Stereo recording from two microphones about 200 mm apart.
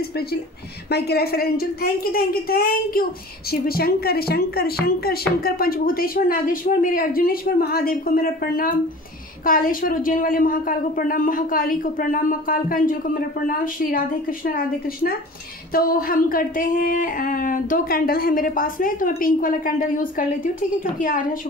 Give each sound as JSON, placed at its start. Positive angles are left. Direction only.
{"t": 0.8, "sound": "speech", "side_deg": 55}
{"t": 15.7, "sound": "speech", "side_deg": 45}